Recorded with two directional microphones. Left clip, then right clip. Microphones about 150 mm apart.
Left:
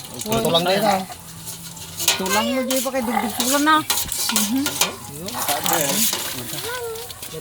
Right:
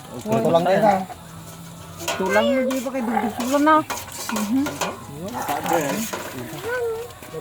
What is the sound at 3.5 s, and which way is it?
Stir, 20° left (ahead or behind).